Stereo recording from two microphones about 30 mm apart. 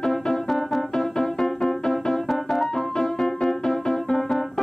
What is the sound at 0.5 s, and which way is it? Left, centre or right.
Keyboard, centre.